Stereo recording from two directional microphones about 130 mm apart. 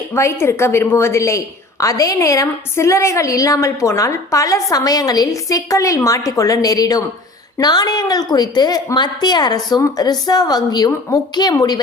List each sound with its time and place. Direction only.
0.1 s a woman's voice: 20° left (ahead or behind)